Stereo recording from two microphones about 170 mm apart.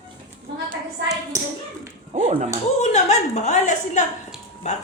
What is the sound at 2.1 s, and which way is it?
Speech, 45° right (ahead or behind).